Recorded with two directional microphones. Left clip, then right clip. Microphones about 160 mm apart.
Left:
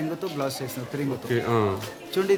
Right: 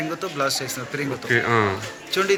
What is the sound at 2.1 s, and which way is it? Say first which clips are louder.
Speech: right 2 dB; 60° left (ahead or behind).